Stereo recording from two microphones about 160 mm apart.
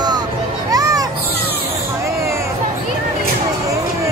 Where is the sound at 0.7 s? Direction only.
20° right (ahead or behind).